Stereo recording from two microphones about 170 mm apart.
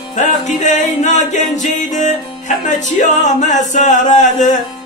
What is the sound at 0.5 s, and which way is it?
Singing, 45° left (ahead or behind).